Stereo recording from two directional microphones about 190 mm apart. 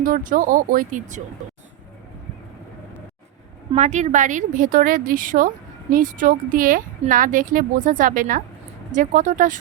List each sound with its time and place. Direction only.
0.0 s speech: 45° right (ahead or behind)
3.7 s speech: 40° right (ahead or behind)